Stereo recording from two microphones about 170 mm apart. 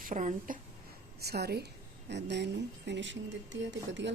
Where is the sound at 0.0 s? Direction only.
50° right (ahead or behind).